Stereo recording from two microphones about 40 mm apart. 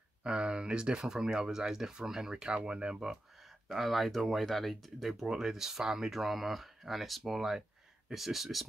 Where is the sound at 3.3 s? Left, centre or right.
Centre.